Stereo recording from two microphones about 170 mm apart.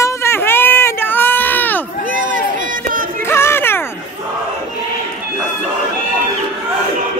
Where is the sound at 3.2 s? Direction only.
15° left (ahead or behind).